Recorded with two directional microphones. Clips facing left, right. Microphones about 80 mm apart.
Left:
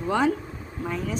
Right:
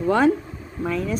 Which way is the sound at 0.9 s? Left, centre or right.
Right.